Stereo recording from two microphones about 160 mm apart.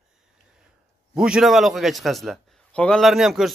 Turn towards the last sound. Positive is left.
turn(degrees=0)  # may be behind; listen again after turning